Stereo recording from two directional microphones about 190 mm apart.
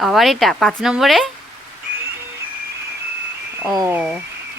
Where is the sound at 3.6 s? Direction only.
15° right (ahead or behind).